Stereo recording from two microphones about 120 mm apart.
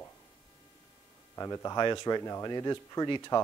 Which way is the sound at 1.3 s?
25° left (ahead or behind).